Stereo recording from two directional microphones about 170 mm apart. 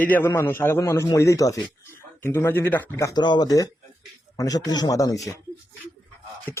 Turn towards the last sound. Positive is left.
turn(degrees=20)  # may be behind; listen again after turning